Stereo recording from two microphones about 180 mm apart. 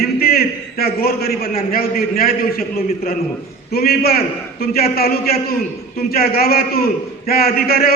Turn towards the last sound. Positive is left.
turn(degrees=60)  # may be behind; listen again after turning